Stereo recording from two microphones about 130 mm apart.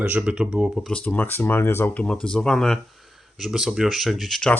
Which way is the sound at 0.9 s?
10° left (ahead or behind).